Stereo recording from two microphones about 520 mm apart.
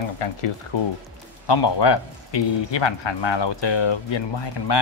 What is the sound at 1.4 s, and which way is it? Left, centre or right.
Speech, left.